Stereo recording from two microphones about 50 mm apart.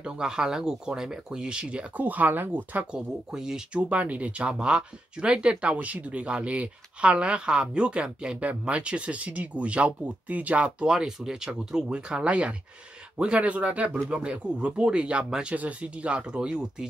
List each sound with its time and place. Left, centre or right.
0.0 s speech: centre
2.0 s speech: right
2.9 s speech: centre
3.7 s speech: right
15.5 s speech: right